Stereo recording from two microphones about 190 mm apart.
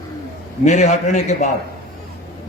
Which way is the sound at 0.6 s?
40° left (ahead or behind).